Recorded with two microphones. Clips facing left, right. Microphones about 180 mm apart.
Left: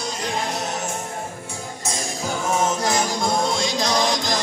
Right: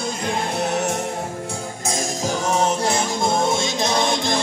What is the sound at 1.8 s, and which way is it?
Music, 45° right (ahead or behind).